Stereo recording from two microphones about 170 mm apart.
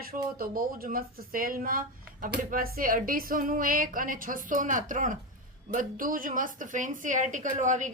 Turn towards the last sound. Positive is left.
turn(degrees=-45)  # may be behind; listen again after turning